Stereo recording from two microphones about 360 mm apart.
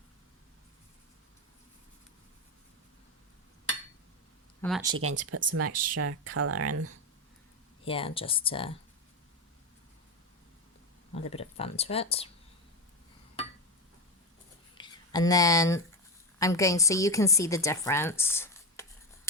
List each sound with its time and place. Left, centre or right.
4.6 s speech: centre
4.9 s speech: right
7.9 s speech: centre
11.1 s speech: centre
14.8 s a woman's voice: centre